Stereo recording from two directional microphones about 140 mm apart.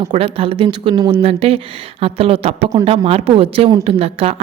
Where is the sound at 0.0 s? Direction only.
45° right (ahead or behind).